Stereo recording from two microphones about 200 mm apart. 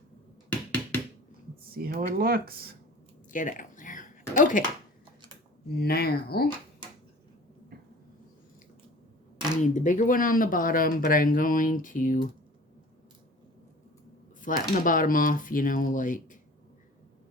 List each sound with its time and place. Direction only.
0.7 s a sound: 10° left (ahead or behind)
1.7 s speech: 50° right (ahead or behind)
3.3 s a sound: 40° left (ahead or behind)
4.4 s speech: 40° left (ahead or behind)
5.7 s speech: 50° left (ahead or behind)
9.7 s speech: 40° left (ahead or behind)
14.4 s speech: 45° left (ahead or behind)